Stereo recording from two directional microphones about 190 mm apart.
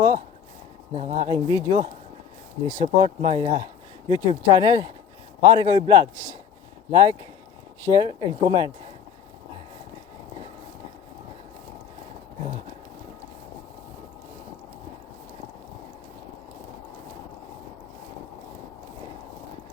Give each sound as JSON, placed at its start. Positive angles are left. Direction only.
{"t": 0.9, "sound": "speech", "side_deg": -35}